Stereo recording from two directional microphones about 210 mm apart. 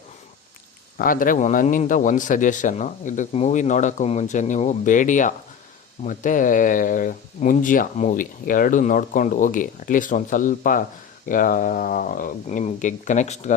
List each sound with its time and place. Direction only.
0.9 s speech: 40° left (ahead or behind)